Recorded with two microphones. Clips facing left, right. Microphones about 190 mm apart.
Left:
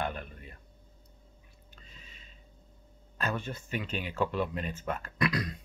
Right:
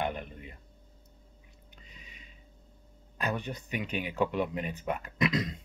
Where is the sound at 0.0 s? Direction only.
20° right (ahead or behind).